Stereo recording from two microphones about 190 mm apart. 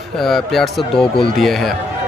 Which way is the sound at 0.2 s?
Centre (ahead or behind).